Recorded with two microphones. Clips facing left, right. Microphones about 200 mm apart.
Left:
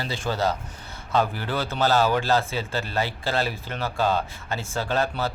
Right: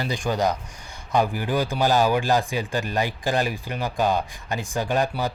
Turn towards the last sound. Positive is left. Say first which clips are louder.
# right 2 dB
turn(degrees=-15)  # may be behind; listen again after turning